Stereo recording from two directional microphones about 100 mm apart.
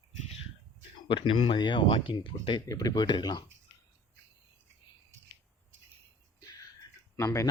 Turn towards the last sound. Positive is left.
turn(degrees=30)  # may be behind; listen again after turning